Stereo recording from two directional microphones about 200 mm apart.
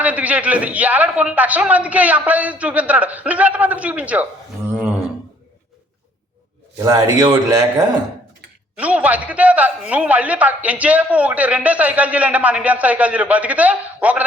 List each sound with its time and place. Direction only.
0.0 s a man's voice: 5° right (ahead or behind)
6.8 s a man's voice: 20° right (ahead or behind)
8.7 s a man's voice: 5° right (ahead or behind)